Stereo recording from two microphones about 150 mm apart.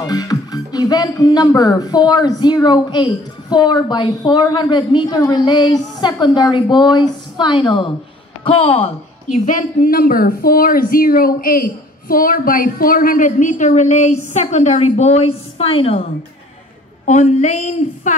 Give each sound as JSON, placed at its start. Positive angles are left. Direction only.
{"t": 0.0, "sound": "speech", "side_deg": 25}
{"t": 9.5, "sound": "speech", "side_deg": 60}
{"t": 17.0, "sound": "speech", "side_deg": 55}